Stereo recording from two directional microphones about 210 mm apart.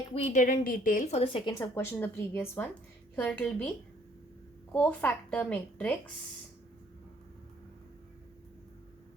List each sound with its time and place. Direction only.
0.1 s a woman's voice: 30° left (ahead or behind)
1.5 s a woman's voice: 15° left (ahead or behind)
4.7 s a woman's voice: 5° left (ahead or behind)